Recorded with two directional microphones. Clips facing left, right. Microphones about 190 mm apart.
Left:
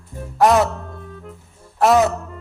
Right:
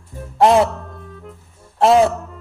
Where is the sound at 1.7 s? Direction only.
25° right (ahead or behind).